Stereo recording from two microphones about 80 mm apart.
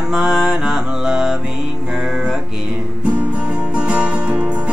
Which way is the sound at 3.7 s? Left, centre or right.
Centre.